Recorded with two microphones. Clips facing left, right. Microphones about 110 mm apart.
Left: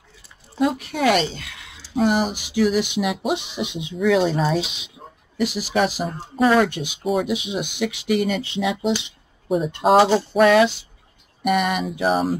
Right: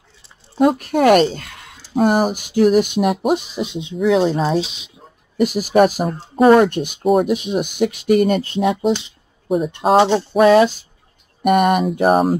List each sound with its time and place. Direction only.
0.6 s speech: 50° right (ahead or behind); by 4.9 s 35° right (ahead or behind)
5.4 s speech: 50° right (ahead or behind)
9.5 s a sound: centre (ahead or behind)
10.4 s speech: 35° right (ahead or behind)
11.4 s speech: 50° right (ahead or behind)